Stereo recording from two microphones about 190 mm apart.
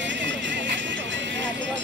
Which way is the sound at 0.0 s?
70° right (ahead or behind).